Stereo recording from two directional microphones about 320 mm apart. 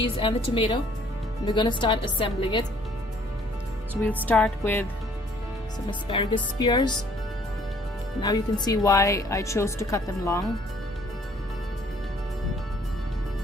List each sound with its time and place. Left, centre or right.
0.0 s a woman's voice: centre
4.0 s music: centre
5.9 s a woman's voice: centre
8.2 s a woman's voice: centre